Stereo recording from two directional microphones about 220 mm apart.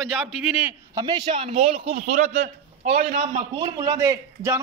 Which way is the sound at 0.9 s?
20° right (ahead or behind).